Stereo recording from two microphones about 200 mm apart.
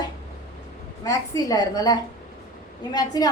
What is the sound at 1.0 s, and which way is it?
A woman's voice, 15° left (ahead or behind).